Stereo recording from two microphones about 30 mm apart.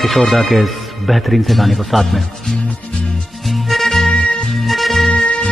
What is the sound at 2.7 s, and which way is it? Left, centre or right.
Music, left.